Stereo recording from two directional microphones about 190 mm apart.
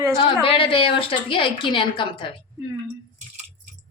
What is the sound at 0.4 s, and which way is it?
A woman's voice, 30° left (ahead or behind).